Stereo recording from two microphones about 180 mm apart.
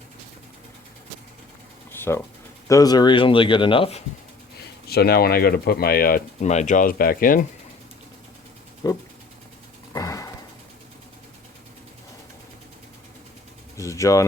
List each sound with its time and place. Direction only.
1.9 s a sound: 15° left (ahead or behind)
2.6 s speech: 20° left (ahead or behind)
4.9 s speech: 60° left (ahead or behind)
8.8 s speech: 20° left (ahead or behind)
9.9 s a sound: 20° left (ahead or behind)
13.7 s pigeon: 15° left (ahead or behind)